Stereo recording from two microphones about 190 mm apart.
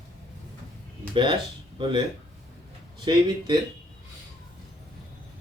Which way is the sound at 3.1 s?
25° right (ahead or behind).